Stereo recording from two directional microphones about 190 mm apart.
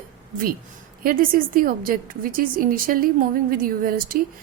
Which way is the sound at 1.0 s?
50° right (ahead or behind).